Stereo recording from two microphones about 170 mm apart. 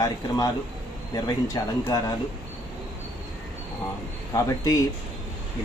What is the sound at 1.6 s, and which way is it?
Speech, 20° left (ahead or behind).